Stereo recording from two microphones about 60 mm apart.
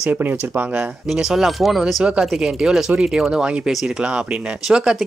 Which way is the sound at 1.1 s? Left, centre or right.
Centre.